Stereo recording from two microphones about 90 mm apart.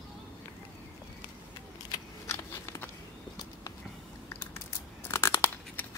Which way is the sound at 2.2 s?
35° left (ahead or behind).